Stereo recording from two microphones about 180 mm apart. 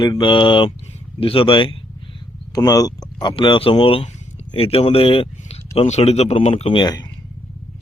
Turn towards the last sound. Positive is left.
turn(degrees=25)  # may be behind; listen again after turning